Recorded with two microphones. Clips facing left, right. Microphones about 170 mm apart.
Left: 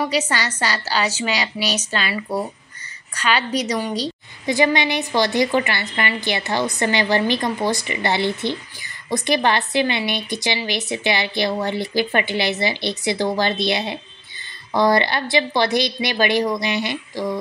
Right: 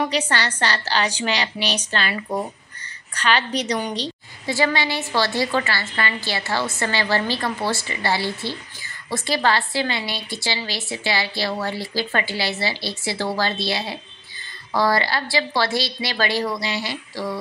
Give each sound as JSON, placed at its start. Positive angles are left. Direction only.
{"t": 0.0, "sound": "a woman's voice", "side_deg": 10}
{"t": 3.2, "sound": "a woman's voice", "side_deg": 10}